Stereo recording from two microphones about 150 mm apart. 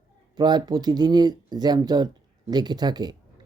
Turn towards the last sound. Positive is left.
turn(degrees=-25)  # may be behind; listen again after turning